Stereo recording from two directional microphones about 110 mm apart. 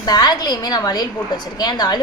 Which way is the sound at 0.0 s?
35° left (ahead or behind).